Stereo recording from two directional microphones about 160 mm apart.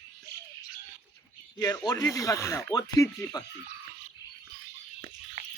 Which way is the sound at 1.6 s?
25° left (ahead or behind).